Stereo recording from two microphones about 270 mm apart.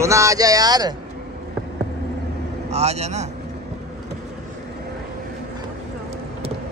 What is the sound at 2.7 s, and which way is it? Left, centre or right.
Speech, right.